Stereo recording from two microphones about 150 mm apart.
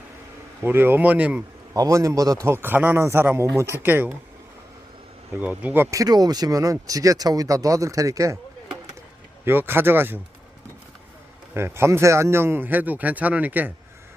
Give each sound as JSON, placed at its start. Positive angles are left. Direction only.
{"t": 0.6, "sound": "speech", "side_deg": -15}
{"t": 1.7, "sound": "speech", "side_deg": -20}
{"t": 5.4, "sound": "speech", "side_deg": -10}
{"t": 9.4, "sound": "speech", "side_deg": -15}
{"t": 11.5, "sound": "speech", "side_deg": -15}